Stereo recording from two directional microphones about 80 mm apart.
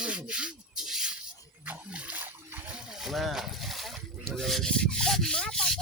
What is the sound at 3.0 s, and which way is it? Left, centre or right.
Speech, centre.